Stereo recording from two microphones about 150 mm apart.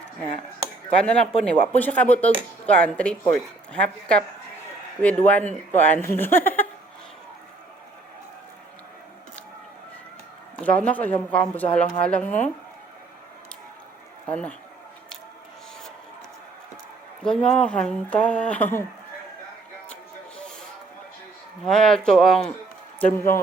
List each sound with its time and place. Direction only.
0.9 s speech: 5° left (ahead or behind)
10.6 s speech: 10° left (ahead or behind)
14.3 s speech: 10° left (ahead or behind)
17.2 s speech: 5° left (ahead or behind)
21.6 s speech: 5° left (ahead or behind)